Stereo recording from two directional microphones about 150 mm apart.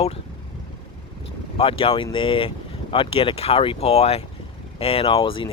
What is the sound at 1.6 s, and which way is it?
Speech, 40° left (ahead or behind).